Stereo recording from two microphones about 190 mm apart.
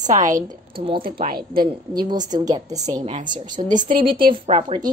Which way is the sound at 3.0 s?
40° right (ahead or behind).